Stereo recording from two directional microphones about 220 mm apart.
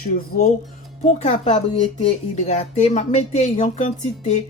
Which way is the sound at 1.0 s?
30° left (ahead or behind).